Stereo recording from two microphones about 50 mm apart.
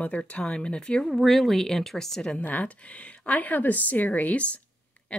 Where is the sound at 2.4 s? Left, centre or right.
Left.